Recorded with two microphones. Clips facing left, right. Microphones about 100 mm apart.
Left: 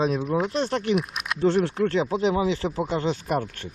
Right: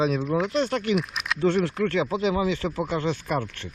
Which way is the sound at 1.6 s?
35° left (ahead or behind).